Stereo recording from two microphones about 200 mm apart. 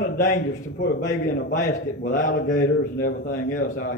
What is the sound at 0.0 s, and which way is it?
A man's voice, 40° left (ahead or behind).